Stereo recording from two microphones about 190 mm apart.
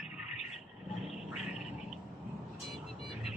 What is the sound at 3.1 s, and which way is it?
Vehicle, centre (ahead or behind).